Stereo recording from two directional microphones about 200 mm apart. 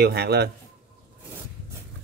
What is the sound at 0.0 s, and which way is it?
Speech, 55° right (ahead or behind).